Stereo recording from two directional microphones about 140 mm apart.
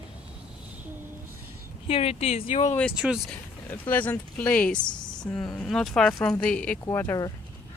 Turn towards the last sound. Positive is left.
turn(degrees=15)  # may be behind; listen again after turning